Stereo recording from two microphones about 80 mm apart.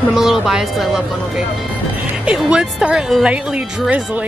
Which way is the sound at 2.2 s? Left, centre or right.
Centre.